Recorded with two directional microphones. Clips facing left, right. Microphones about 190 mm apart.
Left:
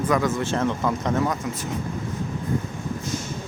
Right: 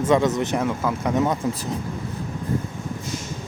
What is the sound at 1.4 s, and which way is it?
Speech, 30° right (ahead or behind).